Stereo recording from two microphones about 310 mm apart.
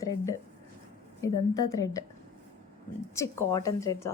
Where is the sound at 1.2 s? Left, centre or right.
Centre.